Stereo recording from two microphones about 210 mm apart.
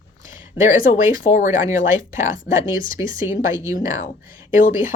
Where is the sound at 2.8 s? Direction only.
15° right (ahead or behind).